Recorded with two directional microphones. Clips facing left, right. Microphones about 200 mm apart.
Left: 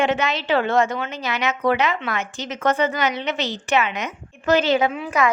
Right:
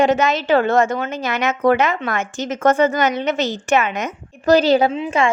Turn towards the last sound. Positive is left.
turn(degrees=-25)  # may be behind; listen again after turning